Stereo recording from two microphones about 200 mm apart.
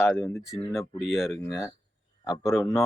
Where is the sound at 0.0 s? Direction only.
15° left (ahead or behind).